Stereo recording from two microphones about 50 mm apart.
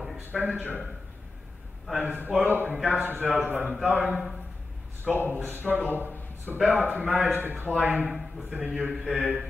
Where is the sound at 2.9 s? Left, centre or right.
Right.